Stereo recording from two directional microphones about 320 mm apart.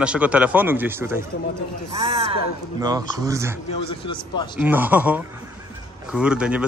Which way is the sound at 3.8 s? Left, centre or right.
Centre.